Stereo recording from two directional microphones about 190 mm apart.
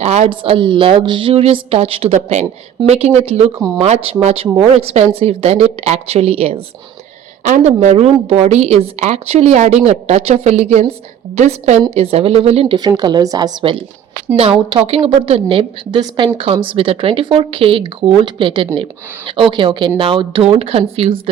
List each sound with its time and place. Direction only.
0.0 s a woman's voice: 35° right (ahead or behind)